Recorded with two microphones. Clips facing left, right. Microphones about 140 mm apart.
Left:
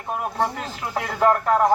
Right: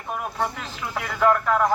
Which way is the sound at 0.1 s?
35° left (ahead or behind).